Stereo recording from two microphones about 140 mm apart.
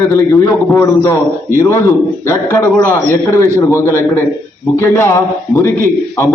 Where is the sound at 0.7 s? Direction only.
15° left (ahead or behind).